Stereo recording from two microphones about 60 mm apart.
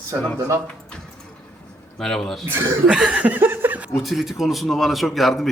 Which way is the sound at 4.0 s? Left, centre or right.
Centre.